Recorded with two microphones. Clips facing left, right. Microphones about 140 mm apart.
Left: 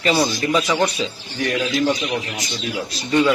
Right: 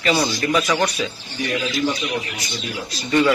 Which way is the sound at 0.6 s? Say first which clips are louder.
Left 1 dB; 20° left (ahead or behind).